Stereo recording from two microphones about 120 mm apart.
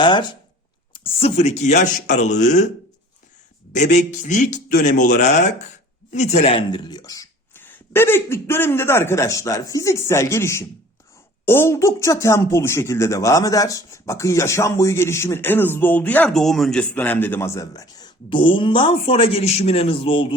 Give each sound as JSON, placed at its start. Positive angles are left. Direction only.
{"t": 0.0, "sound": "speech", "side_deg": 40}
{"t": 0.9, "sound": "speech", "side_deg": 55}
{"t": 3.7, "sound": "speech", "side_deg": 90}
{"t": 6.1, "sound": "a man's voice", "side_deg": 75}
{"t": 7.5, "sound": "speech", "side_deg": 20}
{"t": 16.3, "sound": "a man's voice", "side_deg": 0}